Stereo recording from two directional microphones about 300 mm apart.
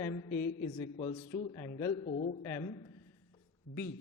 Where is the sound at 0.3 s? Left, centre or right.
Left.